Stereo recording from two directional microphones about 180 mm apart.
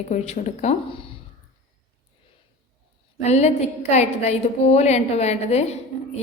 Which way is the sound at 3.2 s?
40° left (ahead or behind).